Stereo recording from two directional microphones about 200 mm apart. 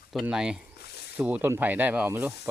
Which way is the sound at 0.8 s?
55° left (ahead or behind).